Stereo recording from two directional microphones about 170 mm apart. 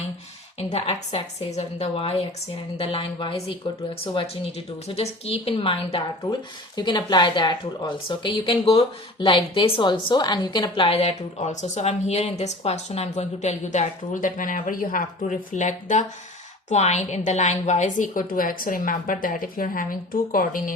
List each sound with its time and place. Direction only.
0.7 s a woman's voice: 40° left (ahead or behind)